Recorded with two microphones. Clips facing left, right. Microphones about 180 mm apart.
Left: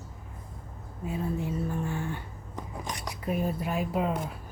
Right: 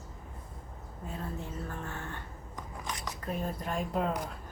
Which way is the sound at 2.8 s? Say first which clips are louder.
Left 3 dB; 10° left (ahead or behind).